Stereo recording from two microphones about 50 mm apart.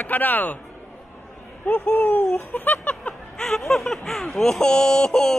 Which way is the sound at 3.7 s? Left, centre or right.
Centre.